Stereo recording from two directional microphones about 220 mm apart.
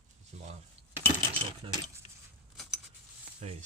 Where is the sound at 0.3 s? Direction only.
30° right (ahead or behind).